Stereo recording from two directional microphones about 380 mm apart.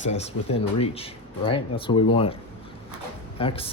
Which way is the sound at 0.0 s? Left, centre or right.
Centre.